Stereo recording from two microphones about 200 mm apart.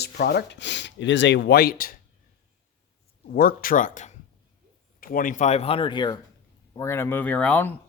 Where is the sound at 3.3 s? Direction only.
50° left (ahead or behind); by 7.7 s 10° left (ahead or behind).